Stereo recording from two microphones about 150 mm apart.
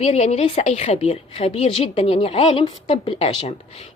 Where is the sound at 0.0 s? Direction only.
45° left (ahead or behind).